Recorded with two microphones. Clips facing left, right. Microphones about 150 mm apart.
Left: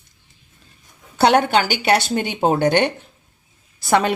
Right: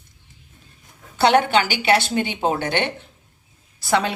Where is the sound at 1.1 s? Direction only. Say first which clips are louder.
Left 1 dB; 45° left (ahead or behind).